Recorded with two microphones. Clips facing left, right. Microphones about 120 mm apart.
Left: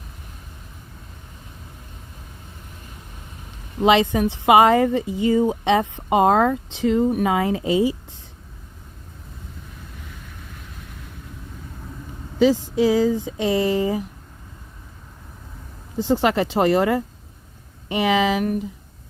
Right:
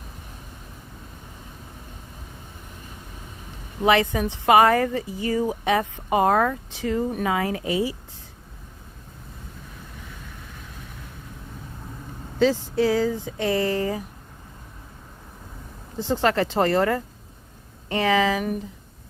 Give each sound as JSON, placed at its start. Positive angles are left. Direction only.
{"t": 3.8, "sound": "speech", "side_deg": 20}
{"t": 12.4, "sound": "speech", "side_deg": 15}
{"t": 16.0, "sound": "speech", "side_deg": 15}